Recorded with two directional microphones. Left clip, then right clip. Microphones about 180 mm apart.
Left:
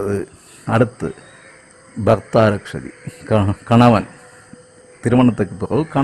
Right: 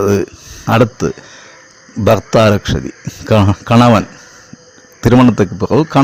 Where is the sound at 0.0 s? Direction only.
20° right (ahead or behind).